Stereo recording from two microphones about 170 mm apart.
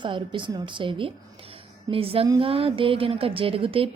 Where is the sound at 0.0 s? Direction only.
30° right (ahead or behind).